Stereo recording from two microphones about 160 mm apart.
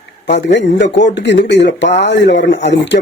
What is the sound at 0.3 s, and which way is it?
Speech, 90° left.